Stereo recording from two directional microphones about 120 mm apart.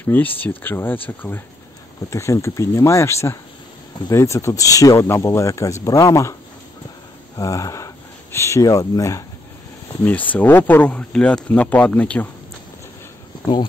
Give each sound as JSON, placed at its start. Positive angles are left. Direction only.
{"t": 0.0, "sound": "speech", "side_deg": 15}
{"t": 7.3, "sound": "speech", "side_deg": 30}
{"t": 10.3, "sound": "speech", "side_deg": 15}